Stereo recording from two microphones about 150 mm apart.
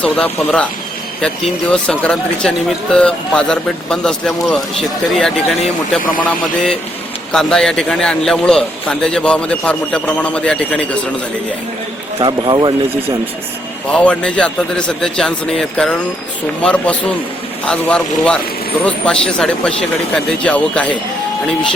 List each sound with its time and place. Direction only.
0.0 s a man's voice: 5° left (ahead or behind)
1.7 s speech: 5° left (ahead or behind)
7.3 s speech: 5° left (ahead or behind)
12.2 s speech: 30° right (ahead or behind)
13.9 s a man's voice: 5° left (ahead or behind)